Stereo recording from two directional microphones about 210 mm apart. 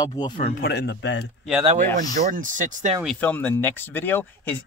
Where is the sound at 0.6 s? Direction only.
50° left (ahead or behind).